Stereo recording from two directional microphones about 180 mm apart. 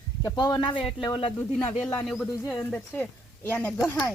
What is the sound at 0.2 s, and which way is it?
Speech, 25° left (ahead or behind).